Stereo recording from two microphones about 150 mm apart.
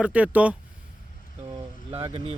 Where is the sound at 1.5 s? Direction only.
40° right (ahead or behind).